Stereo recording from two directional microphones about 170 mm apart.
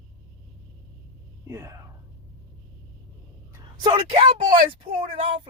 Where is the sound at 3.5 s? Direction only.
25° right (ahead or behind).